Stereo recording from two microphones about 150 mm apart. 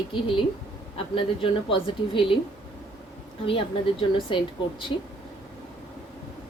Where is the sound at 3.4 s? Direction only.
40° left (ahead or behind).